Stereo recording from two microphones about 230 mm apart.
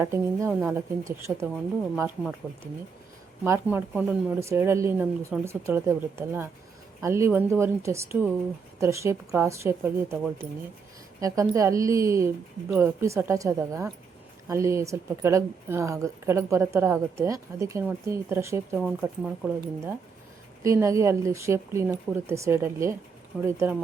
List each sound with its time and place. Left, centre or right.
0.0 s speech: centre
3.4 s speech: centre